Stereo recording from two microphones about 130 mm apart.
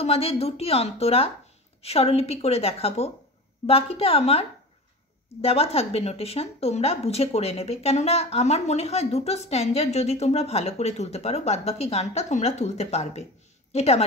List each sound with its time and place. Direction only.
0.0 s a woman's voice: 50° left (ahead or behind)